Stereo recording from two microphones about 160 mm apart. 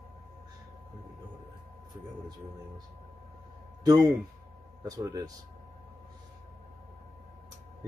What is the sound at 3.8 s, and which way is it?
Speech, 25° right (ahead or behind).